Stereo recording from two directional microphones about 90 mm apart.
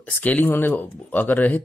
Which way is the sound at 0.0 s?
20° left (ahead or behind).